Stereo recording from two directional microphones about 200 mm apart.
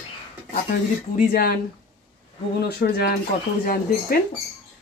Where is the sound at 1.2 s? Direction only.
50° left (ahead or behind).